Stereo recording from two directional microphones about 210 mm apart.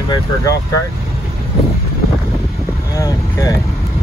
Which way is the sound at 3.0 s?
15° left (ahead or behind).